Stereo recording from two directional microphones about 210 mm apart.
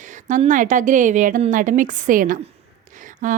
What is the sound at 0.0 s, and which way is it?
Speech, 35° right (ahead or behind).